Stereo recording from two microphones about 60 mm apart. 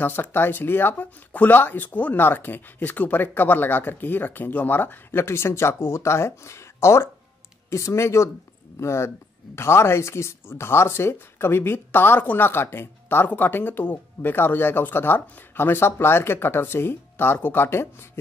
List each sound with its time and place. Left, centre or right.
0.0 s speech: left